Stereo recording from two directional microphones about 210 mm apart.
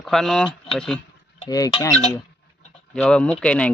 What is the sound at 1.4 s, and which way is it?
Speech, 20° left (ahead or behind).